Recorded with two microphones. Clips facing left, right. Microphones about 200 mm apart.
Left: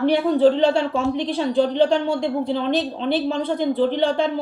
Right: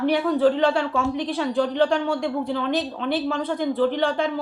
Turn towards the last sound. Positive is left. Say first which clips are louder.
# left 2 dB
turn(degrees=30)  # may be behind; listen again after turning